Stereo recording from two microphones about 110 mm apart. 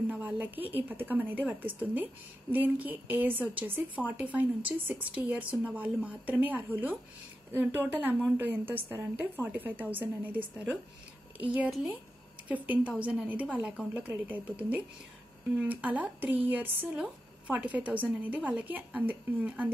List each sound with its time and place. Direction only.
0.1 s speech: 15° right (ahead or behind)